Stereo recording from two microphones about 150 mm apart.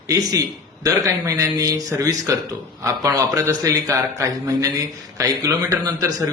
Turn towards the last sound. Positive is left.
turn(degrees=-20)  # may be behind; listen again after turning